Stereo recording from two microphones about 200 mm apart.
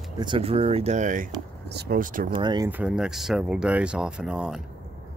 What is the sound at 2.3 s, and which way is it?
Speech, 20° right (ahead or behind).